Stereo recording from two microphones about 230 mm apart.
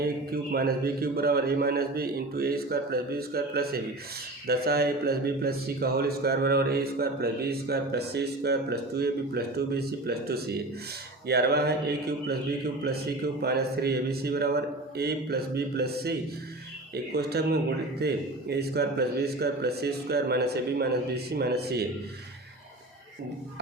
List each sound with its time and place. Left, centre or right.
0.0 s a man's voice: right